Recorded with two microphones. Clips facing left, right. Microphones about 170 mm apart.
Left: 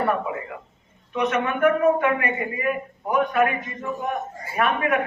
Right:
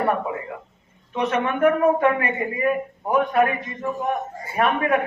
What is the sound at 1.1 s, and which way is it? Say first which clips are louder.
A man's voice: even; 30° right (ahead or behind).